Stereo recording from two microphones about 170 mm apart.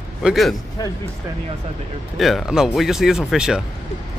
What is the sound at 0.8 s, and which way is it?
Speech, 20° left (ahead or behind).